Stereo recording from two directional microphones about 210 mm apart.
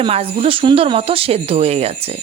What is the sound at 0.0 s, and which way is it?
Speech, 25° right (ahead or behind).